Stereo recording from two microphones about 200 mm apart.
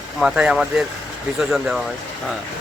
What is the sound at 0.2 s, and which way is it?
Speech, 5° right (ahead or behind).